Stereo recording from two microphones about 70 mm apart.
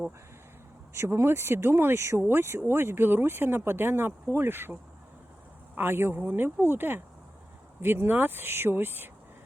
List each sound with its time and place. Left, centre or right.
0.9 s speech: right